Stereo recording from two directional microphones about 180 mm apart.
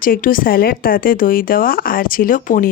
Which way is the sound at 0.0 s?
50° left (ahead or behind).